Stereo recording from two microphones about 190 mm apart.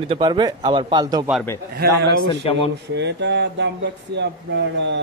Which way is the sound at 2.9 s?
65° right (ahead or behind).